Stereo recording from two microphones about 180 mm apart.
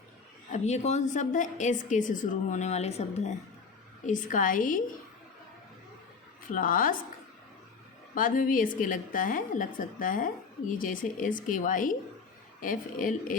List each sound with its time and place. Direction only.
0.5 s a woman's voice: 40° left (ahead or behind)
6.5 s a woman's voice: 50° left (ahead or behind)
8.1 s a woman's voice: 50° left (ahead or behind)